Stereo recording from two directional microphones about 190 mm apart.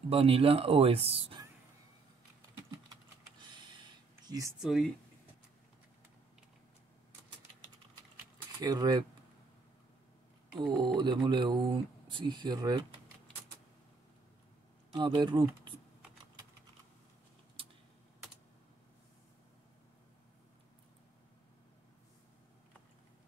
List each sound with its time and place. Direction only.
0.1 s speech: 30° right (ahead or behind)
3.5 s a sound: 25° right (ahead or behind)
4.6 s speech: centre (ahead or behind)
8.5 s speech: 20° right (ahead or behind)
10.5 s speech: 25° right (ahead or behind)
14.9 s speech: 25° right (ahead or behind)